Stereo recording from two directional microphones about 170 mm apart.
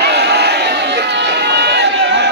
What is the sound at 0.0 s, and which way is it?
Crowd, 80° right.